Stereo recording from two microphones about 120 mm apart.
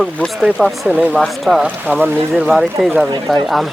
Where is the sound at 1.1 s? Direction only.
Centre (ahead or behind).